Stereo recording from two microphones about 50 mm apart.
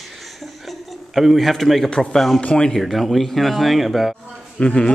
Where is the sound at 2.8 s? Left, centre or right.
Centre.